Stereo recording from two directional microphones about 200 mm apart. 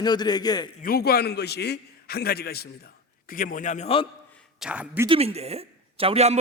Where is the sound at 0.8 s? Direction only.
50° left (ahead or behind); by 4.0 s 30° left (ahead or behind).